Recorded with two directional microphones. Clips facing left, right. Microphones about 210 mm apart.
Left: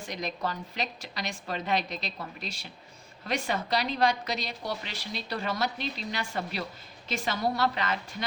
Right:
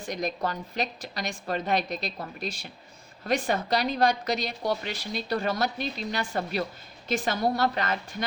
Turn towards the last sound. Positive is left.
turn(degrees=-45)  # may be behind; listen again after turning